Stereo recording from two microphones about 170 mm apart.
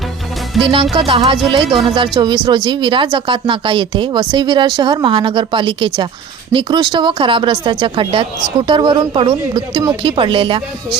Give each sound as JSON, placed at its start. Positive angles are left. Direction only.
{"t": 0.6, "sound": "speech", "side_deg": -30}